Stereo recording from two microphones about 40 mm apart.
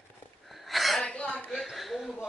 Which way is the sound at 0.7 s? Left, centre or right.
Centre.